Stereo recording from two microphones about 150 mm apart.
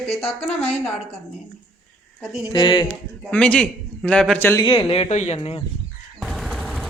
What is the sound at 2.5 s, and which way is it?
Speech, 30° left (ahead or behind).